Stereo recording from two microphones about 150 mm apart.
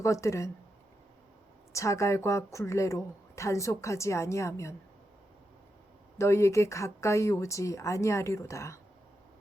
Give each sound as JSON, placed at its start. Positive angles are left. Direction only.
{"t": 0.0, "sound": "speech", "side_deg": 20}
{"t": 1.7, "sound": "speech", "side_deg": 20}
{"t": 6.1, "sound": "speech", "side_deg": 20}